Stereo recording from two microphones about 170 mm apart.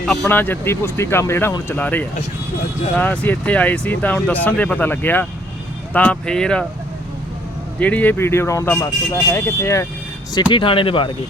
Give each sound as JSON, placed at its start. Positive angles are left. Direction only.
{"t": 0.0, "sound": "speech", "side_deg": 5}
{"t": 7.8, "sound": "speech", "side_deg": 10}
{"t": 10.5, "sound": "speech", "side_deg": 30}